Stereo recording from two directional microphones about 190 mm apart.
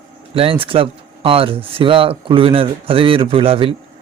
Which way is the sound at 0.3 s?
30° right (ahead or behind).